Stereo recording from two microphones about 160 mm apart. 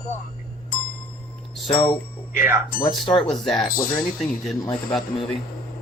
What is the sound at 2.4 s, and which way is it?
Speech, 15° right (ahead or behind).